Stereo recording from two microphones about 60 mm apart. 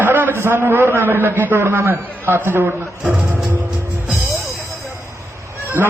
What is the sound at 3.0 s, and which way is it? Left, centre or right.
Music, right.